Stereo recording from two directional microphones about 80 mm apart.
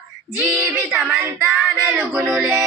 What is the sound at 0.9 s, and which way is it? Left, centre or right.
Speech, centre.